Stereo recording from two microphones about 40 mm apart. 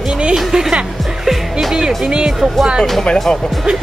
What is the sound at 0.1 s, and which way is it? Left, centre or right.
Music, right.